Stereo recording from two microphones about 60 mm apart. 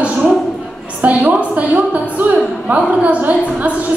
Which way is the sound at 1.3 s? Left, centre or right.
Right.